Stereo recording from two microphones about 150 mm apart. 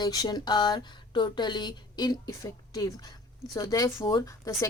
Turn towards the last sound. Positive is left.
turn(degrees=20)  # may be behind; listen again after turning